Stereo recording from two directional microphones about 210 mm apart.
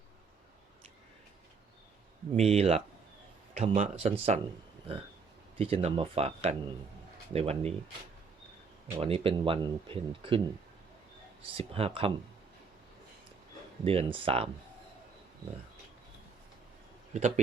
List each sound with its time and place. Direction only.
2.3 s speech: 30° right (ahead or behind)
5.5 s speech: 25° right (ahead or behind)
9.0 s speech: 25° right (ahead or behind)
11.5 s speech: 25° right (ahead or behind)
13.8 s speech: 25° right (ahead or behind)
17.2 s speech: 35° right (ahead or behind)